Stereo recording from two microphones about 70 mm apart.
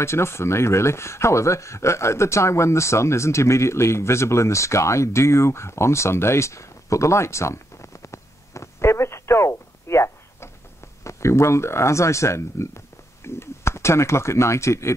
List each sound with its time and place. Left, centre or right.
0.0 s speech: left